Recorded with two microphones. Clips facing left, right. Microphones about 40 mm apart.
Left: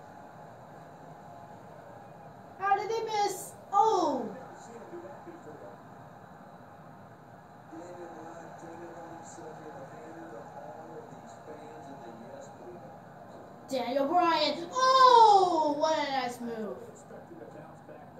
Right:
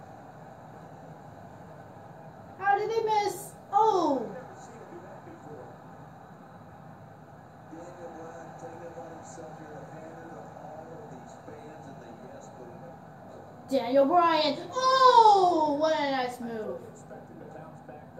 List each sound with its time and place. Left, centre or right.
2.6 s babbling: centre
13.7 s a woman's voice: centre
14.7 s speech: centre